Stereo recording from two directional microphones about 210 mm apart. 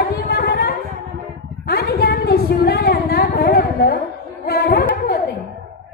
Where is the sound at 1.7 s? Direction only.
50° left (ahead or behind).